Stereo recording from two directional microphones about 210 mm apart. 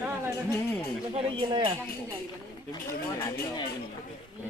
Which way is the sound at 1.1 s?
25° right (ahead or behind).